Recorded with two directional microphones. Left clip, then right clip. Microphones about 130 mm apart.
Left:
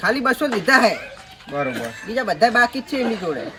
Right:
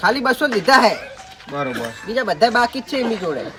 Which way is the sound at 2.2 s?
40° right (ahead or behind).